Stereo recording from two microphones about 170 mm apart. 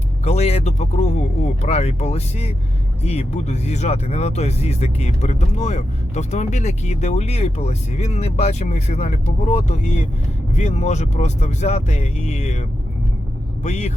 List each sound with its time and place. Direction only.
0.3 s speech: 40° left (ahead or behind)
13.7 s speech: 40° left (ahead or behind)